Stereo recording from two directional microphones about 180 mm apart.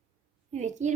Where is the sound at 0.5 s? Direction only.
40° right (ahead or behind).